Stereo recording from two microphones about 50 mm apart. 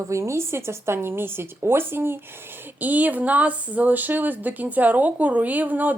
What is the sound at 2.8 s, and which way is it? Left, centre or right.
Speech, right.